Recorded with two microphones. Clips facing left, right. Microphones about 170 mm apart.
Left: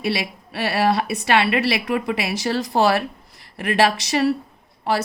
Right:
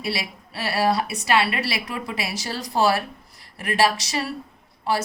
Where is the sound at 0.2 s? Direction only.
60° left (ahead or behind).